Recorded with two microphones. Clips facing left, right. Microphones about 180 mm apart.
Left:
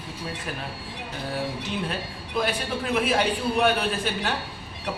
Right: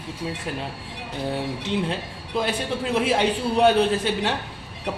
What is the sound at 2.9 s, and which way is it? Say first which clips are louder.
A man's voice: right 2 dB; 25° right (ahead or behind).